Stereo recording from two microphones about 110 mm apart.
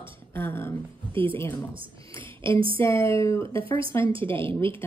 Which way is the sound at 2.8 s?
20° left (ahead or behind).